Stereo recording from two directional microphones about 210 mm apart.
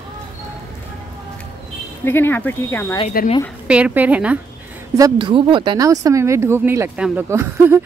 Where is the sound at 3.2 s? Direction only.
45° left (ahead or behind).